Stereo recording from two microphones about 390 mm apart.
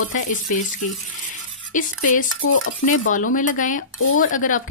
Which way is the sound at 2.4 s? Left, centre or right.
Left.